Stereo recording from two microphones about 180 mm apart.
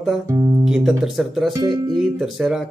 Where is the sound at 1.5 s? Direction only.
20° right (ahead or behind).